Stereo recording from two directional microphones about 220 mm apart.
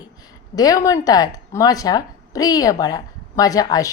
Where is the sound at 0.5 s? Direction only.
15° left (ahead or behind).